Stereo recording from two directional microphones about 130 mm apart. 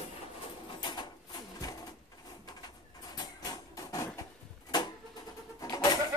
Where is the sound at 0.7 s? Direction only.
35° left (ahead or behind).